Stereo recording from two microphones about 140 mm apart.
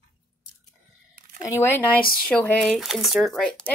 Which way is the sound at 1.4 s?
20° left (ahead or behind).